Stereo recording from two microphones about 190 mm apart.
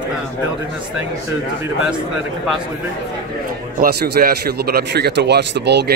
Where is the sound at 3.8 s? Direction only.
50° right (ahead or behind).